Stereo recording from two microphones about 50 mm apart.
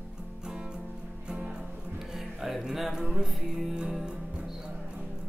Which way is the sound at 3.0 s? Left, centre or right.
Centre.